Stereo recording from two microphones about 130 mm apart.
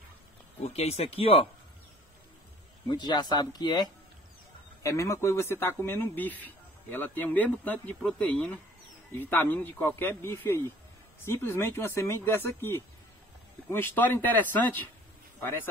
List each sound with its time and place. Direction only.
0.7 s speech: 55° left (ahead or behind)
2.9 s speech: 35° left (ahead or behind)
4.8 s speech: 25° left (ahead or behind)